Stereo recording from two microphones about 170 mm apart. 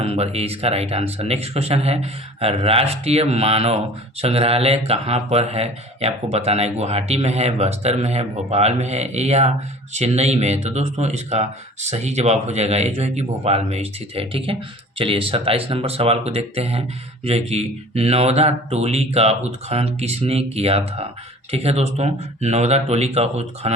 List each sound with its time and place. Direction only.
0.0 s speech: 35° right (ahead or behind)